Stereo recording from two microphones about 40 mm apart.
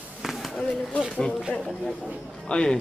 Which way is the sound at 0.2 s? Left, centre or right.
Centre.